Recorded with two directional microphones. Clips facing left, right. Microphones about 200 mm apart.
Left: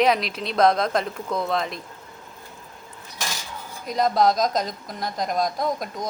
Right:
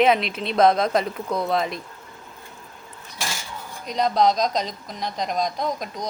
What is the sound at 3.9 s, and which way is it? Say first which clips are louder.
Speech: even; centre (ahead or behind).